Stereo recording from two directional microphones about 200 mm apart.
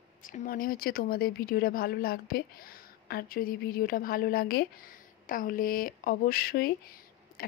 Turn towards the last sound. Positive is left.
turn(degrees=50)  # may be behind; listen again after turning